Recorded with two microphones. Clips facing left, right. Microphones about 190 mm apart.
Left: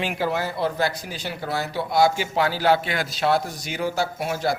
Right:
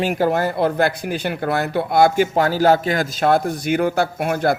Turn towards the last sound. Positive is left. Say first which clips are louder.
# right 6 dB
turn(degrees=-55)  # may be behind; listen again after turning